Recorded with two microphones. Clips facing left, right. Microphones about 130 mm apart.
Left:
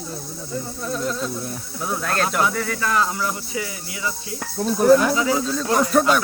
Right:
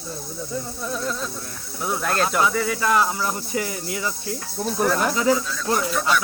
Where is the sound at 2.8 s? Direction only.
20° right (ahead or behind).